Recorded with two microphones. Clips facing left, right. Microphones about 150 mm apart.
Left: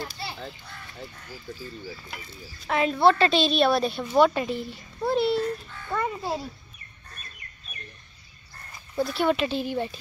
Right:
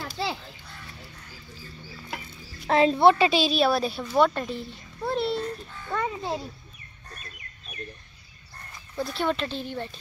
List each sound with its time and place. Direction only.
0.2 s children playing: 90° right
2.7 s speech: 30° right (ahead or behind)
3.1 s a child's voice: 10° right (ahead or behind)
8.9 s speech: 5° left (ahead or behind)